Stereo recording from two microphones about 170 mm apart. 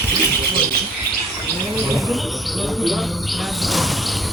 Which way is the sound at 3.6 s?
Centre (ahead or behind).